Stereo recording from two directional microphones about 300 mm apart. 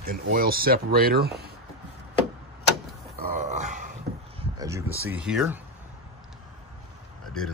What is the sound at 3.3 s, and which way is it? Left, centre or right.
Grunt, right.